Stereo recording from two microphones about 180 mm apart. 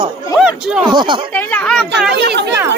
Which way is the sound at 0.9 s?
25° right (ahead or behind).